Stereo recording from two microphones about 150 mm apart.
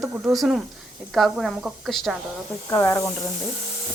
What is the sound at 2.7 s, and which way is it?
Speech, 15° left (ahead or behind).